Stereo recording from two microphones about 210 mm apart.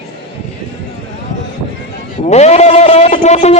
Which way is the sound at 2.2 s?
30° left (ahead or behind).